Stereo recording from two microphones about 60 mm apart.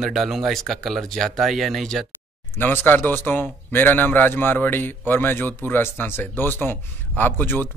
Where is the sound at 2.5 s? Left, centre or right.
Left.